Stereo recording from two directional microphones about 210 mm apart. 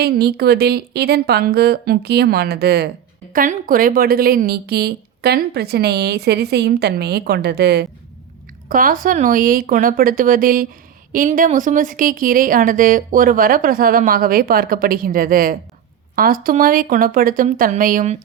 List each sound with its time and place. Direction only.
0.0 s speech: 50° right (ahead or behind)
8.7 s a woman's voice: 40° right (ahead or behind)